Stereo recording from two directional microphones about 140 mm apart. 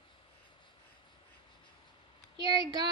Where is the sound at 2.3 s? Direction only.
30° right (ahead or behind).